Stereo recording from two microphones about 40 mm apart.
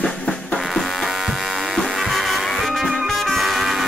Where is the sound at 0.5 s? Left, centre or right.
Centre.